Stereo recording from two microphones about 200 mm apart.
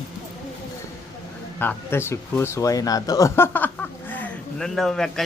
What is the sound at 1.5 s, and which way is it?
A man's voice, 10° left (ahead or behind).